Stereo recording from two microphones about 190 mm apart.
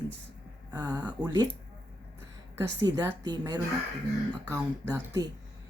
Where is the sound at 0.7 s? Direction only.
20° right (ahead or behind).